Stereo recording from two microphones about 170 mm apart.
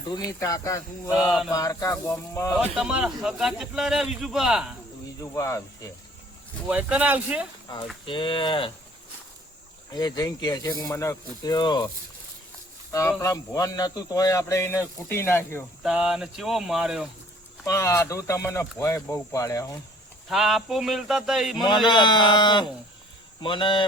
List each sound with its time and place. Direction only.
0.1 s speech: 20° left (ahead or behind)
1.1 s speech: centre (ahead or behind)
1.5 s speech: 20° left (ahead or behind)
2.6 s speech: 5° right (ahead or behind)
5.2 s speech: 15° left (ahead or behind)
6.7 s speech: 5° right (ahead or behind)
7.7 s speech: 25° left (ahead or behind)
9.9 s speech: 20° left (ahead or behind)
12.9 s speech: 20° left (ahead or behind)
15.8 s speech: 5° right (ahead or behind)
17.7 s speech: 15° left (ahead or behind)
20.3 s speech: centre (ahead or behind)
21.8 s speech: 25° left (ahead or behind)